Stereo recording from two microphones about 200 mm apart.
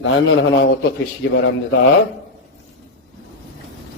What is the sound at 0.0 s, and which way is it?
Speech, 75° left (ahead or behind).